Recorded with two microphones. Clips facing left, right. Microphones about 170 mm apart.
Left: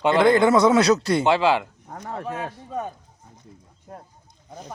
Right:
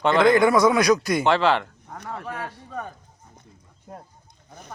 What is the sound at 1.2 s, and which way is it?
Speech, 15° left (ahead or behind).